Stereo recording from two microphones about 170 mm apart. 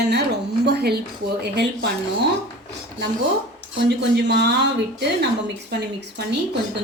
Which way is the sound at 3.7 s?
85° right.